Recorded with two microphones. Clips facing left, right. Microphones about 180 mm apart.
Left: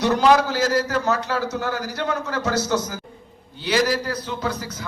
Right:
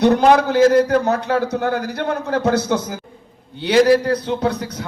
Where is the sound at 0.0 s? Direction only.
55° right (ahead or behind).